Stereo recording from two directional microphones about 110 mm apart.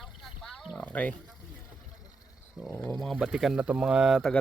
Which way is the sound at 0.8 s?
15° left (ahead or behind).